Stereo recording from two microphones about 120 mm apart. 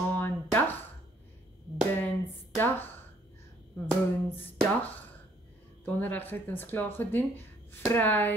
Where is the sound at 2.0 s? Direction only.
15° left (ahead or behind).